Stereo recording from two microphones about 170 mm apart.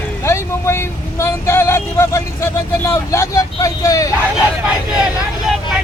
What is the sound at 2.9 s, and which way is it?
Speech, 15° left (ahead or behind).